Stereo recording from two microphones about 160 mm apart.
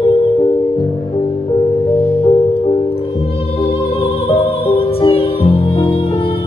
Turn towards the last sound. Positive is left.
turn(degrees=35)  # may be behind; listen again after turning